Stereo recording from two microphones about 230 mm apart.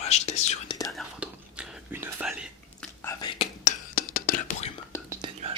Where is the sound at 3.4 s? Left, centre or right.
Left.